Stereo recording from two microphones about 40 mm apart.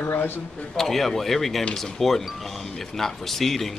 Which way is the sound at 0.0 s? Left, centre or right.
Left.